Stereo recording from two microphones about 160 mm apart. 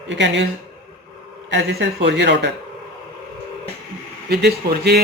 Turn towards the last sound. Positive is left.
turn(degrees=-90)